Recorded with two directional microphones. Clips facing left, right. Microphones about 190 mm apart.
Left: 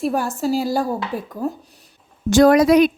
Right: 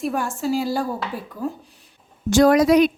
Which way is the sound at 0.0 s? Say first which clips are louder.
Left 3 dB; 35° left (ahead or behind).